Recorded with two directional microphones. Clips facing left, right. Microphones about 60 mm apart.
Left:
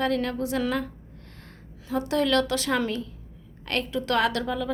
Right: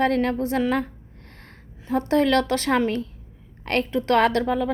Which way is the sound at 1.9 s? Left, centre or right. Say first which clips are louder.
Right 4 dB; right.